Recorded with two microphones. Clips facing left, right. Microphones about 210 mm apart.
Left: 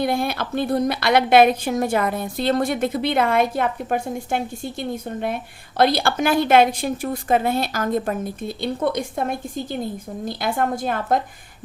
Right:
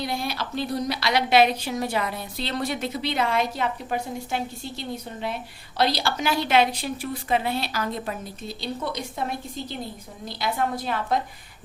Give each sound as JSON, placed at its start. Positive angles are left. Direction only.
{"t": 0.0, "sound": "a woman's voice", "side_deg": 55}